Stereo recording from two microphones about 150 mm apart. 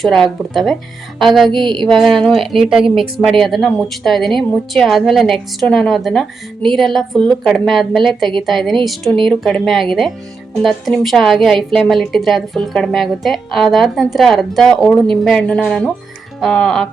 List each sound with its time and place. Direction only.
0.0 s a woman's voice: centre (ahead or behind)
1.6 s music: 30° right (ahead or behind)
1.9 s a woman's voice: centre (ahead or behind)